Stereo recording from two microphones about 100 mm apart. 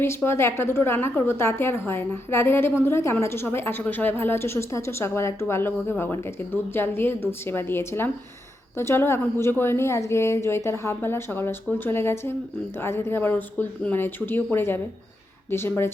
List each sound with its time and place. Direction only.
0.3 s a woman's voice: 25° left (ahead or behind)